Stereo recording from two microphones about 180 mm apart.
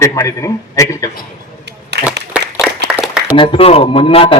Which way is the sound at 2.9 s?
5° right (ahead or behind).